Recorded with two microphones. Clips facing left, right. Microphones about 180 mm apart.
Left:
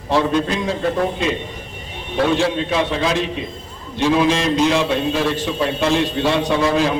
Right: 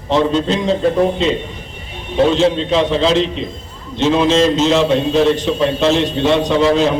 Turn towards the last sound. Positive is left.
turn(degrees=-20)  # may be behind; listen again after turning